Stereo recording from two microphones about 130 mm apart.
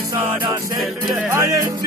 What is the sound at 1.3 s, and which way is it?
Music, 25° right (ahead or behind).